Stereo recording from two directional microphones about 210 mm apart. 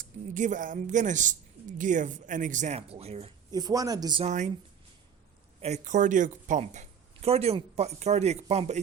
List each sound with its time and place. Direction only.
0.0 s speech: 35° right (ahead or behind); by 4.2 s 20° right (ahead or behind)
4.2 s speech: 35° right (ahead or behind)
5.5 s speech: 30° right (ahead or behind)